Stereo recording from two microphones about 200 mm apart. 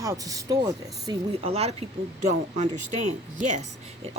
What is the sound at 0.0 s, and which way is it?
Speech, 15° right (ahead or behind).